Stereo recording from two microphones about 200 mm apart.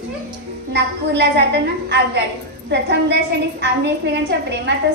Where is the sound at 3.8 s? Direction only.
60° right (ahead or behind).